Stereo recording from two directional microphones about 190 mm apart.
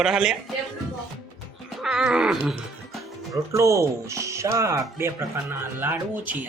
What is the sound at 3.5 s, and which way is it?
Speech, 15° right (ahead or behind).